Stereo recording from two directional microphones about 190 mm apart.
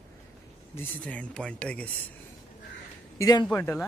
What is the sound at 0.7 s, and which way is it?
Speech, 10° left (ahead or behind).